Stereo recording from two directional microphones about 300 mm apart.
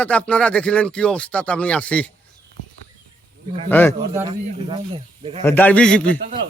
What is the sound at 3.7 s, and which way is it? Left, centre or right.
Speech, centre.